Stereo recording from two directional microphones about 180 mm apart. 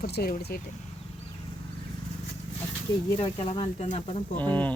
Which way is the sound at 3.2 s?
30° left (ahead or behind).